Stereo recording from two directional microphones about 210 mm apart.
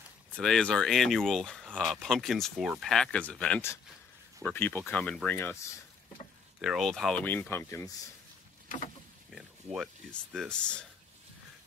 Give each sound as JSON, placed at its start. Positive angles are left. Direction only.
{"t": 0.4, "sound": "speech", "side_deg": 5}
{"t": 6.6, "sound": "speech", "side_deg": 0}
{"t": 8.6, "sound": "boat", "side_deg": 35}
{"t": 9.3, "sound": "a sound", "side_deg": 0}
{"t": 10.3, "sound": "speech", "side_deg": 0}